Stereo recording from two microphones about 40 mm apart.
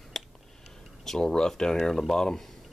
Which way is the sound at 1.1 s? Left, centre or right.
Centre.